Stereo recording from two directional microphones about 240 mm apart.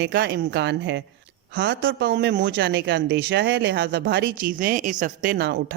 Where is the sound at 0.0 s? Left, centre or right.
Right.